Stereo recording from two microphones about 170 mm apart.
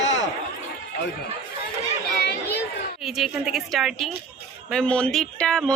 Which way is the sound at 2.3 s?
75° left (ahead or behind).